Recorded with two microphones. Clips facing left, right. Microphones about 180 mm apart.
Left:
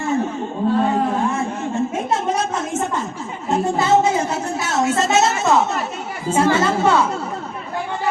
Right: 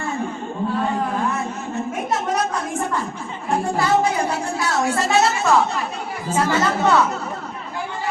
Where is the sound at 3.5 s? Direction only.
20° left (ahead or behind).